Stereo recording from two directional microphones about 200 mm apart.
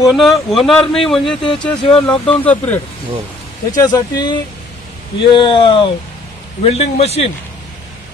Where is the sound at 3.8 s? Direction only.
20° left (ahead or behind).